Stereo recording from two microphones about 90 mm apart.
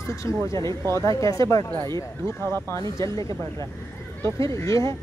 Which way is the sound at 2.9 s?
35° left (ahead or behind).